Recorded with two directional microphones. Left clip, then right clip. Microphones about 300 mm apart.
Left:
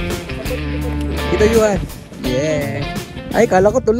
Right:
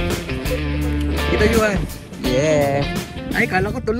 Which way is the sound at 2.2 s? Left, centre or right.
Centre.